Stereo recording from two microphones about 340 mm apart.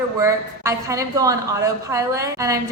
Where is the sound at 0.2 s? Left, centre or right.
Centre.